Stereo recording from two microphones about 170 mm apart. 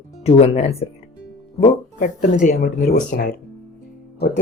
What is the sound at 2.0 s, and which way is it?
Speech, 45° left (ahead or behind).